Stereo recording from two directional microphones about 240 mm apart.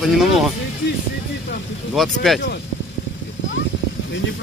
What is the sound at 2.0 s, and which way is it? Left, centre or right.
Speech, centre.